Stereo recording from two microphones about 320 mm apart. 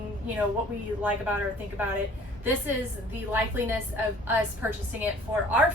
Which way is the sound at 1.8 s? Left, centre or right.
Centre.